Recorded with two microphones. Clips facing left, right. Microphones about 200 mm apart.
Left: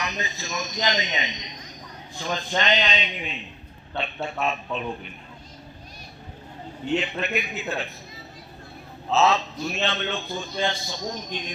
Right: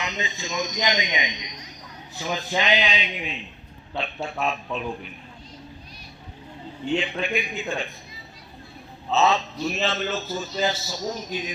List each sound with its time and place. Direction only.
0.0 s a man's voice: 20° right (ahead or behind); by 4.9 s centre (ahead or behind)
6.8 s a man's voice: 5° left (ahead or behind)
9.0 s a man's voice: centre (ahead or behind)